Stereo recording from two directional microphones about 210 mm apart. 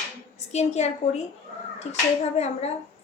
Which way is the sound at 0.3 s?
30° left (ahead or behind).